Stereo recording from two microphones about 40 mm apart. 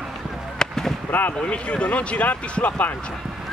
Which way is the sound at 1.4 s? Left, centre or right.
Left.